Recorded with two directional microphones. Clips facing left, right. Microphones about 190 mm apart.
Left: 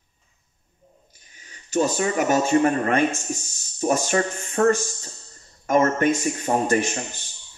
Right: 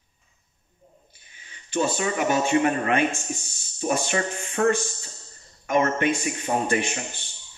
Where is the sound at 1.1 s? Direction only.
40° left (ahead or behind).